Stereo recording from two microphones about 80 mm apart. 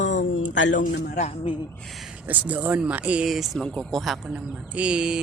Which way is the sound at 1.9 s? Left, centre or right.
Centre.